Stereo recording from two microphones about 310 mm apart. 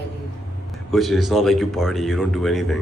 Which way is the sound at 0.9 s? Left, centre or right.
Centre.